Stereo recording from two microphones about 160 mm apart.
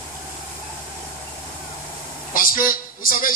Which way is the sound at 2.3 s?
60° left (ahead or behind).